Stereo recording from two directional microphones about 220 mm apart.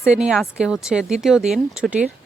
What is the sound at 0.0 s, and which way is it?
Speech, 5° right (ahead or behind).